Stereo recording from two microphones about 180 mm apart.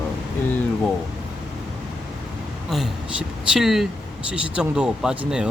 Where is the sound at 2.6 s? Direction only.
Centre (ahead or behind).